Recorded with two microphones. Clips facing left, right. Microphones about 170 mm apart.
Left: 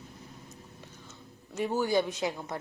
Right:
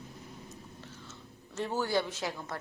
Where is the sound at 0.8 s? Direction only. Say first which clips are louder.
Right 1 dB; 15° left (ahead or behind).